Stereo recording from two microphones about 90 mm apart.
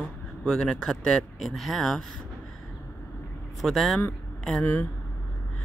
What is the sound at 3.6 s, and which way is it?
Speech, centre (ahead or behind).